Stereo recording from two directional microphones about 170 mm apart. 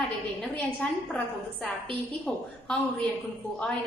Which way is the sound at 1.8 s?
30° right (ahead or behind).